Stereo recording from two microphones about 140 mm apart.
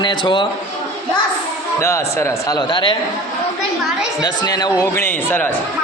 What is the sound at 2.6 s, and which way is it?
Speech, 35° left (ahead or behind).